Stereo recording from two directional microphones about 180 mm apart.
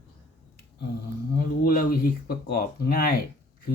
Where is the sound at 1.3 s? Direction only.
50° left (ahead or behind).